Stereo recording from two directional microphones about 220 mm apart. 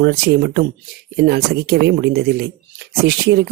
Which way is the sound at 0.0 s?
45° right (ahead or behind).